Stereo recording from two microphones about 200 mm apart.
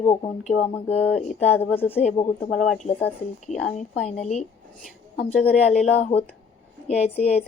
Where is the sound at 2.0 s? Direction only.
30° left (ahead or behind).